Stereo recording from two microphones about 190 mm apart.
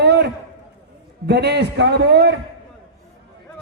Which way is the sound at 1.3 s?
60° right (ahead or behind).